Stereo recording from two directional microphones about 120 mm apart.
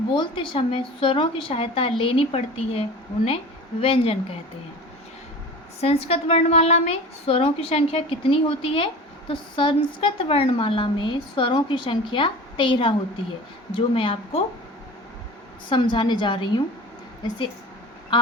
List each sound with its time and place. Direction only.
0.1 s a woman's voice: 45° left (ahead or behind)
5.8 s a woman's voice: 55° left (ahead or behind)
15.7 s a woman's voice: 40° left (ahead or behind)
18.1 s a sound: 40° left (ahead or behind)